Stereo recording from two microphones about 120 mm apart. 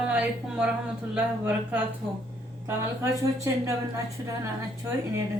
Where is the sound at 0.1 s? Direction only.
10° right (ahead or behind).